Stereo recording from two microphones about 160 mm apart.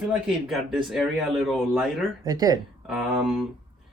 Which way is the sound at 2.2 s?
25° right (ahead or behind).